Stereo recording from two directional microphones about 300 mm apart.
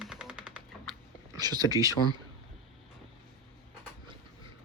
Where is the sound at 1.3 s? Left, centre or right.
Centre.